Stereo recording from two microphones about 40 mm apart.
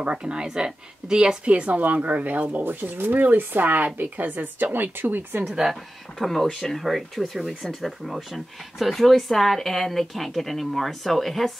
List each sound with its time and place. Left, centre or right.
0.2 s speech: centre
1.5 s speech: right
5.4 s speech: centre
6.1 s speech: centre